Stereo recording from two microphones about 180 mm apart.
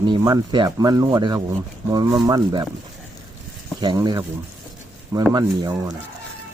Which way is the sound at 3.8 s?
25° right (ahead or behind).